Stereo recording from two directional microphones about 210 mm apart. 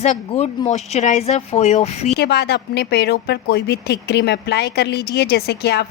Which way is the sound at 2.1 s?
50° left (ahead or behind).